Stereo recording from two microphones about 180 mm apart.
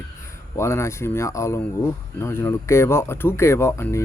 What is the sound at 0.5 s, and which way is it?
Speech, 15° left (ahead or behind).